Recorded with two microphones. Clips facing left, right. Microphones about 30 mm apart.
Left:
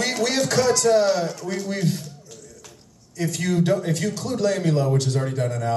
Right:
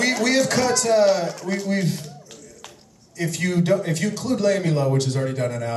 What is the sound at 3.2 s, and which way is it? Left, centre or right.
A man's voice, centre.